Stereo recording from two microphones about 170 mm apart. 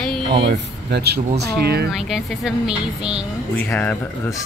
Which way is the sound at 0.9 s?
70° right (ahead or behind).